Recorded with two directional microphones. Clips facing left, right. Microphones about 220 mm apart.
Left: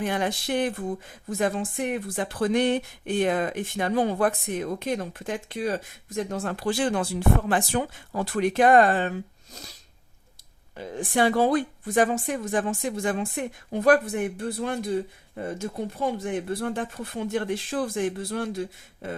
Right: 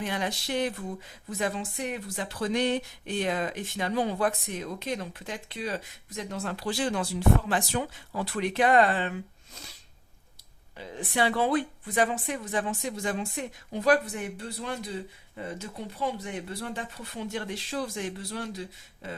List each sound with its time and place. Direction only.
0.0 s speech: 50° left (ahead or behind)
10.8 s speech: 50° left (ahead or behind)